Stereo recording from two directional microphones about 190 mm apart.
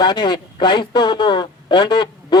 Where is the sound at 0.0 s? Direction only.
20° left (ahead or behind).